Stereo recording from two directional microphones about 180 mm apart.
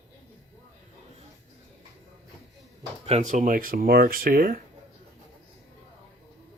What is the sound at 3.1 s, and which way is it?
Speech, 40° right (ahead or behind).